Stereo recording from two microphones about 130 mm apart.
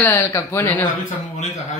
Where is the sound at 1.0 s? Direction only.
75° left (ahead or behind).